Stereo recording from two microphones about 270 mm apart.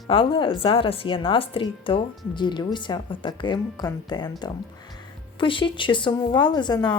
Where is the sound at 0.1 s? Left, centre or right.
Centre.